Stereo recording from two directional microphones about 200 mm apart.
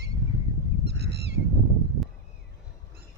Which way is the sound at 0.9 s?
55° right (ahead or behind).